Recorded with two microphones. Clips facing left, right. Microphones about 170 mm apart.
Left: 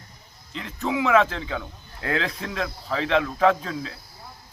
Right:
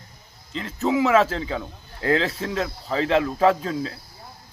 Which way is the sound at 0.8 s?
30° right (ahead or behind).